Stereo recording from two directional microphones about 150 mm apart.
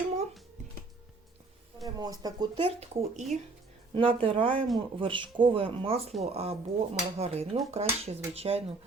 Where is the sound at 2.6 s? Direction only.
45° right (ahead or behind).